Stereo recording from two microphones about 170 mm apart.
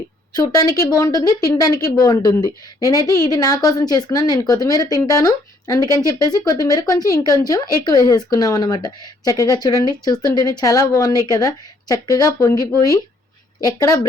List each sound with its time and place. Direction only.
0.3 s speech: 20° left (ahead or behind)